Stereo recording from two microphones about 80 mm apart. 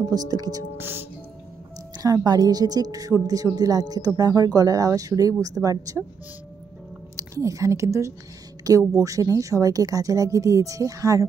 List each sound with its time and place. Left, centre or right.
0.1 s speech: right
0.7 s speech: right
2.0 s speech: right
7.2 s speech: right